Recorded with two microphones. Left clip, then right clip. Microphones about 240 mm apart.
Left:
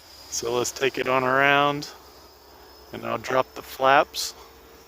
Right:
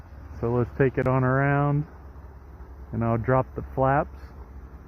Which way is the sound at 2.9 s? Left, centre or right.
Left.